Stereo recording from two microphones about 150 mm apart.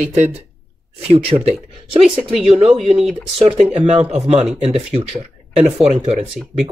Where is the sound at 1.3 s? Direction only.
40° right (ahead or behind).